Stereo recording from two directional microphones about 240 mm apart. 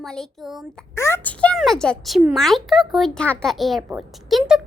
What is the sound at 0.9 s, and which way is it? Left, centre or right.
Speech, centre.